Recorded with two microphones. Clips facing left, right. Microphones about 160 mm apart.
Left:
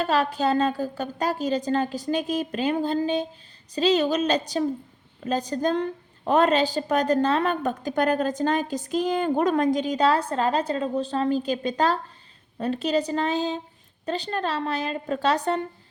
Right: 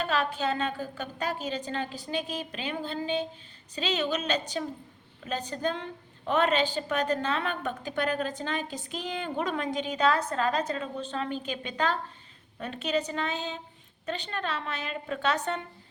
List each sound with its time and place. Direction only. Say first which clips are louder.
0.0 s a woman's voice: left 6 dB; 40° left (ahead or behind)